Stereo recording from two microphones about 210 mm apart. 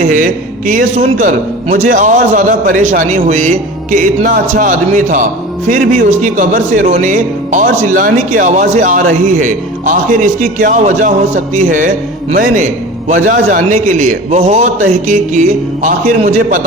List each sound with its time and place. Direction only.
0.0 s a man's voice: 40° right (ahead or behind)